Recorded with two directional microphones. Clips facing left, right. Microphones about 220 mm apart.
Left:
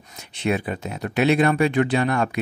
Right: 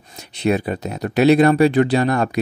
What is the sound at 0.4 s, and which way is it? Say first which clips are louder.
Speech: right 5 dB; 40° right (ahead or behind).